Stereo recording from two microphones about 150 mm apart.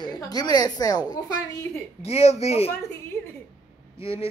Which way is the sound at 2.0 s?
45° left (ahead or behind).